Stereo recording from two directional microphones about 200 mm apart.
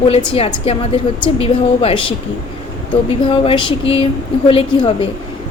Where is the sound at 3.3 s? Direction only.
25° left (ahead or behind).